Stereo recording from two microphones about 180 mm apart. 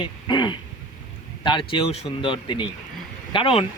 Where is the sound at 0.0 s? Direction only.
25° left (ahead or behind).